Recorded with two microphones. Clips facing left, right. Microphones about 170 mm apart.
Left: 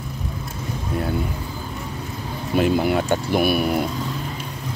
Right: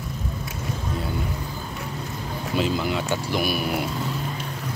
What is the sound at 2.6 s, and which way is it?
Speech, 55° left (ahead or behind).